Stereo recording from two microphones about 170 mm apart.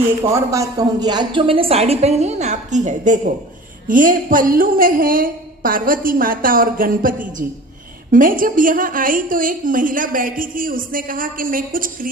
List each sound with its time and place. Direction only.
0.2 s a woman's voice: 20° right (ahead or behind); by 12.0 s 55° right (ahead or behind)